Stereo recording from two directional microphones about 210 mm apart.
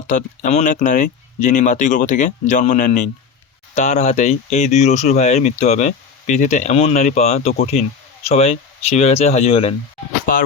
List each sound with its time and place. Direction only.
0.1 s speech: 35° left (ahead or behind)